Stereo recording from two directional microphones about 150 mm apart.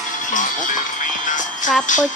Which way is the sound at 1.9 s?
60° left (ahead or behind).